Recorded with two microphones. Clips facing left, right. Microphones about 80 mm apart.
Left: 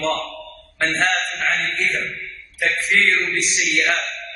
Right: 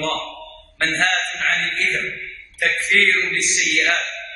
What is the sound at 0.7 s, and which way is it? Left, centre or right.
Speech, centre.